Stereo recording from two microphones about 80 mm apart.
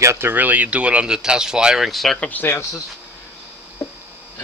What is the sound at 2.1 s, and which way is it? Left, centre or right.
Speech, centre.